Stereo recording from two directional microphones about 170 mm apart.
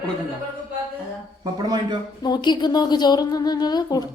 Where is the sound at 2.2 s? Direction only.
25° left (ahead or behind).